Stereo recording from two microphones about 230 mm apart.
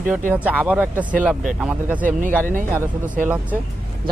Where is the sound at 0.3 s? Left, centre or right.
Centre.